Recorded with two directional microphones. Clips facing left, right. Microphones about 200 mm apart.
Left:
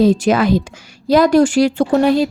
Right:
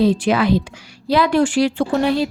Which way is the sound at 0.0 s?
45° left (ahead or behind).